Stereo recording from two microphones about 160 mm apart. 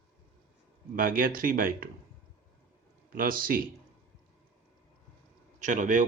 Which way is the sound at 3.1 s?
65° right (ahead or behind).